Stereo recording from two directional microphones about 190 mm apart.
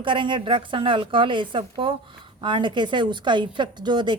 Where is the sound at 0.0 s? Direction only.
25° right (ahead or behind).